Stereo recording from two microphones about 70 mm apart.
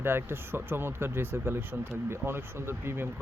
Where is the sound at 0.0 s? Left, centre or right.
Right.